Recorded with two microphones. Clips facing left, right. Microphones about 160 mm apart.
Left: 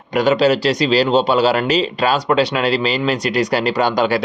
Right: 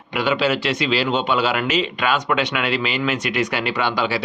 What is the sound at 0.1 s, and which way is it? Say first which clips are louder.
Speech: left 6 dB; 40° left (ahead or behind).